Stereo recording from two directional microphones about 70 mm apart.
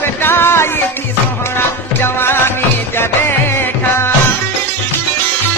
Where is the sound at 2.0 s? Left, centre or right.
Left.